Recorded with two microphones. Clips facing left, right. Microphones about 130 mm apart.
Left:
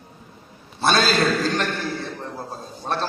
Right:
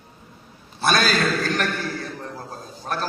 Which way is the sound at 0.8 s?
25° left (ahead or behind).